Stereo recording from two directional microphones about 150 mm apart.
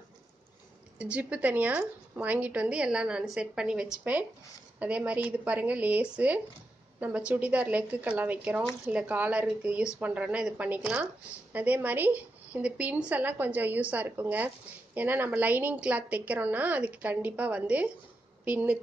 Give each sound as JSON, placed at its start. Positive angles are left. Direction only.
{"t": 0.9, "sound": "a woman's voice", "side_deg": -10}